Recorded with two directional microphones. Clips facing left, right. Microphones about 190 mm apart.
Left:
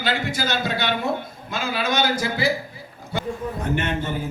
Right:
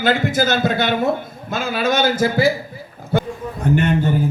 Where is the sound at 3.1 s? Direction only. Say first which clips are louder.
Right 9 dB; 50° right (ahead or behind).